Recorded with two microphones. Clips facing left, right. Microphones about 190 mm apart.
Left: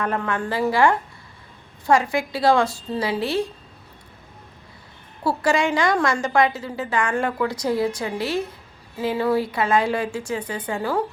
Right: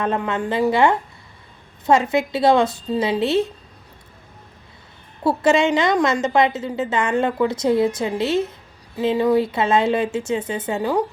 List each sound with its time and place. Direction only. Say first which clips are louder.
0.0 s a woman's voice: right 2 dB; 20° right (ahead or behind)
5.2 s a woman's voice: right 4 dB; 20° right (ahead or behind)